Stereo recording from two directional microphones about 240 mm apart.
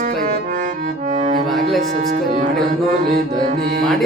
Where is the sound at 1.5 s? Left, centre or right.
Centre.